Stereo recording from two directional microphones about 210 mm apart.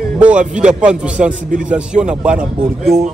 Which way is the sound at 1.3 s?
40° right (ahead or behind).